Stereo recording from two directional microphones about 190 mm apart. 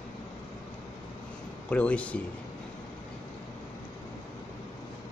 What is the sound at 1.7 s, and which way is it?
Speech, 5° left (ahead or behind).